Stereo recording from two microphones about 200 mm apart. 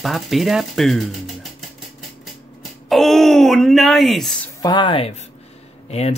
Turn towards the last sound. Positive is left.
turn(degrees=35)  # may be behind; listen again after turning